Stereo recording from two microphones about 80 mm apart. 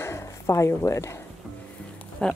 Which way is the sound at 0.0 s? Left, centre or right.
Left.